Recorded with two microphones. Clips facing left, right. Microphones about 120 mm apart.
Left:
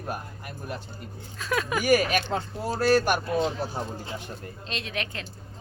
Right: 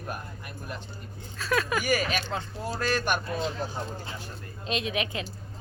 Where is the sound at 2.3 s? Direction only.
45° left (ahead or behind).